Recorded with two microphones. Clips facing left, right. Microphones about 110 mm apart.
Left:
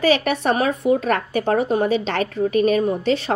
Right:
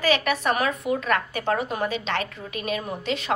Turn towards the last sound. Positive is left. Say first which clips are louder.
# left 9 dB
turn(degrees=35)  # may be behind; listen again after turning